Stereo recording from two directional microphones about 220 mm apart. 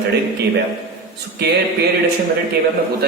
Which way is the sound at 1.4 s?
50° right (ahead or behind).